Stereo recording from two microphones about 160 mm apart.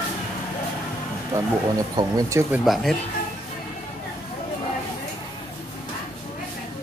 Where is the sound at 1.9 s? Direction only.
20° right (ahead or behind).